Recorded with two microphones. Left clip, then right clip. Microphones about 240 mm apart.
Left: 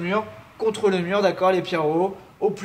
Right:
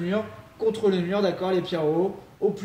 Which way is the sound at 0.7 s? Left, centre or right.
Centre.